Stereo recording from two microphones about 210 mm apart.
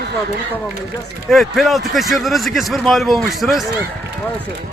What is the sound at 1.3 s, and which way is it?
A man's voice, centre (ahead or behind).